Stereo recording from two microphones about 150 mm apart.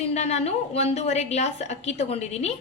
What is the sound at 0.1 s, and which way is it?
A woman's voice, 45° left (ahead or behind).